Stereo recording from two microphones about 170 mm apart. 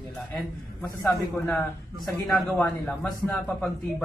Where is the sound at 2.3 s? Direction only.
10° left (ahead or behind).